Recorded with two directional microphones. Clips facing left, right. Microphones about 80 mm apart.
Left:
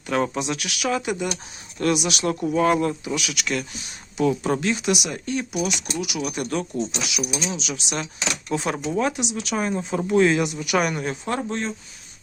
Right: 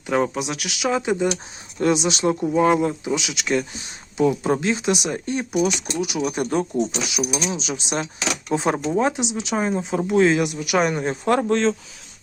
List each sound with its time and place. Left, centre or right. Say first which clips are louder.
0.1 s speech: right 2 dB; centre; by 3.8 s right
4.2 s speech: right 2 dB; centre; by 6.7 s right
6.7 s speech: right 4 dB; right
7.2 s speech: right 3 dB; centre
7.5 s speech: right 3 dB; right; by 10.8 s centre
10.8 s speech: right 3 dB; right
11.3 s speech: right 10 dB; right